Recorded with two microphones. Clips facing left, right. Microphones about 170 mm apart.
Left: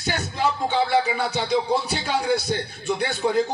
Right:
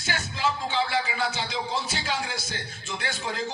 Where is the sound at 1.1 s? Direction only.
60° left (ahead or behind).